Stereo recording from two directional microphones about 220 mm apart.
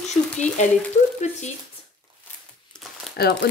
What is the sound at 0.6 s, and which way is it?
Speech, 30° left (ahead or behind).